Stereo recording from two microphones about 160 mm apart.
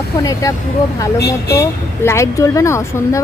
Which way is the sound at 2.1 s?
15° left (ahead or behind).